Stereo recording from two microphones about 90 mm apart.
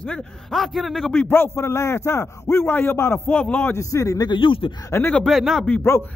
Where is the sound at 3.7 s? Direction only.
40° left (ahead or behind).